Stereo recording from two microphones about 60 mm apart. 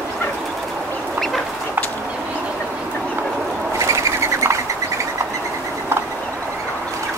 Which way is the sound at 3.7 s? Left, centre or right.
Right.